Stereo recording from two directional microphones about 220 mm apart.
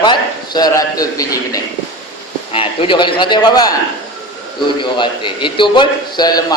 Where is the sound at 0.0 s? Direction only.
20° left (ahead or behind).